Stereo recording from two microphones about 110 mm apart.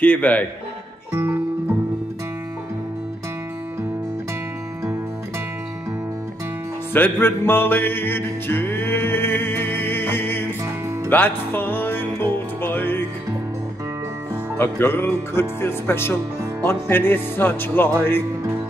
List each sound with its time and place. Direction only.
0.0 s speech: 15° left (ahead or behind)
1.1 s music: 25° right (ahead or behind)
6.9 s music: 20° left (ahead or behind)
14.6 s speech: 20° left (ahead or behind)